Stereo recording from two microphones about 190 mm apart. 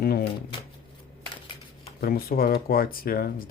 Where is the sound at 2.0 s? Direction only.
50° left (ahead or behind).